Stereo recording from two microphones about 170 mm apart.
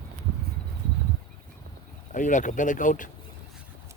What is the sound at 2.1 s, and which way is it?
Speech, 50° left (ahead or behind).